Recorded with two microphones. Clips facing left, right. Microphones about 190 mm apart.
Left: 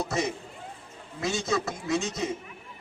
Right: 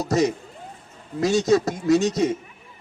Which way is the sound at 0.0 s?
40° right (ahead or behind).